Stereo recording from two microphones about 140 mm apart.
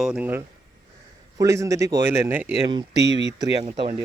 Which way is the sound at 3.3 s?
30° right (ahead or behind).